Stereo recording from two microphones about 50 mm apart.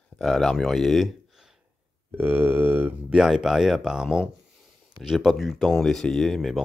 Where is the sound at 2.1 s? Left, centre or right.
Right.